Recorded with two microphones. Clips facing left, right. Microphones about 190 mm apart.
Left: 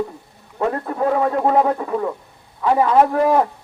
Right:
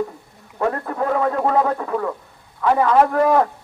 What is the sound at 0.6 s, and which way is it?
A man's voice, 25° left (ahead or behind).